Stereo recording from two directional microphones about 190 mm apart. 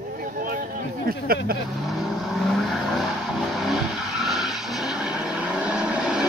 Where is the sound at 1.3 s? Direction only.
50° right (ahead or behind).